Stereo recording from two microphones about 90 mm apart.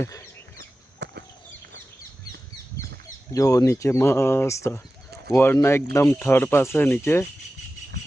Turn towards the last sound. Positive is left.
turn(degrees=25)  # may be behind; listen again after turning